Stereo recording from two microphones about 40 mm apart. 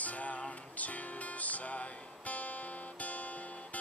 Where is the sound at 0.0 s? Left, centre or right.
Left.